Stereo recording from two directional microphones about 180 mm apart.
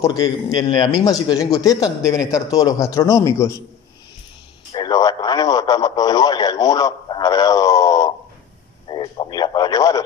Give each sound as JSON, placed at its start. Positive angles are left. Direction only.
{"t": 0.0, "sound": "a man's voice", "side_deg": 20}
{"t": 4.7, "sound": "speech", "side_deg": 20}